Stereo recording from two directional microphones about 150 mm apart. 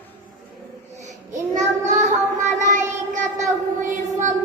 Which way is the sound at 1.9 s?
55° right (ahead or behind).